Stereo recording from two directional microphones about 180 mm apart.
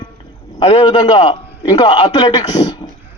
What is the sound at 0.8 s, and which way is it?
A man's voice, 25° left (ahead or behind).